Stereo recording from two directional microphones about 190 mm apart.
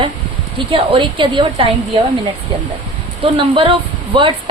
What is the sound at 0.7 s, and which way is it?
Speech, 25° right (ahead or behind).